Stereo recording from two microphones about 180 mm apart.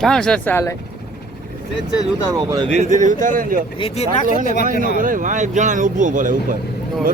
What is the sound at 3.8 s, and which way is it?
Speech, 35° left (ahead or behind).